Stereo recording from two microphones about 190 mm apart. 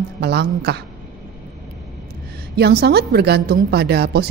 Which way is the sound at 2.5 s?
55° right (ahead or behind).